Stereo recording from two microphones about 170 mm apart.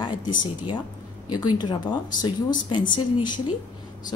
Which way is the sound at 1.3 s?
25° left (ahead or behind).